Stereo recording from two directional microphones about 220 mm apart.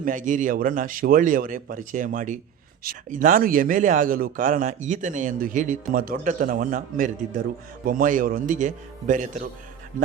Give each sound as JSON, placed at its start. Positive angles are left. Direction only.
{"t": 0.0, "sound": "a man's voice", "side_deg": -35}